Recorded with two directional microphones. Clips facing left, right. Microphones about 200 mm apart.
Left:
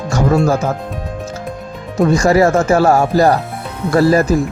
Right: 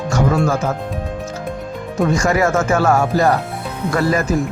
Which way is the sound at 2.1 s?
35° left (ahead or behind).